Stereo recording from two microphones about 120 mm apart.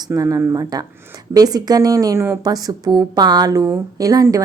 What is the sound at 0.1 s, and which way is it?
A woman's voice, 25° right (ahead or behind).